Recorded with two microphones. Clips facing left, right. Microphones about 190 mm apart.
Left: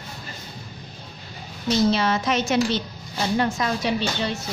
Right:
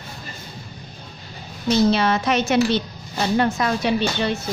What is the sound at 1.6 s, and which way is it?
A woman's voice, 60° right (ahead or behind).